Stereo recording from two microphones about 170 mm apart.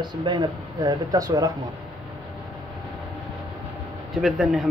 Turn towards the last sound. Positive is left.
turn(degrees=0)  # may be behind; listen again after turning